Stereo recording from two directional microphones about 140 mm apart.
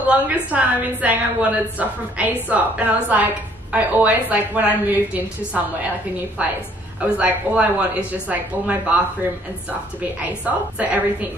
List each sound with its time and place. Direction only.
0.1 s a woman's voice: 10° right (ahead or behind)
10.4 s a woman's voice: 10° right (ahead or behind)